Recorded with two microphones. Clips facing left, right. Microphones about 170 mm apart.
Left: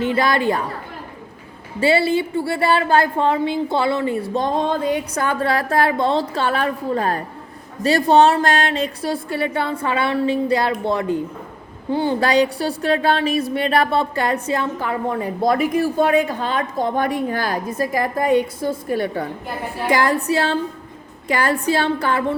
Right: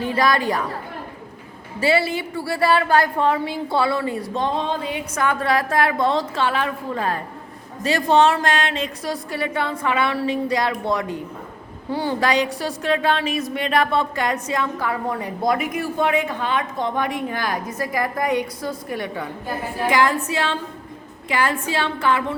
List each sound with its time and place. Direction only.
0.0 s a woman's voice: 25° left (ahead or behind)
1.8 s a woman's voice: 30° left (ahead or behind)
4.4 s speech: 45° left (ahead or behind)